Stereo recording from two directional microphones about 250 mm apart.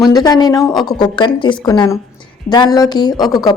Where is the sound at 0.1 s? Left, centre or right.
Centre.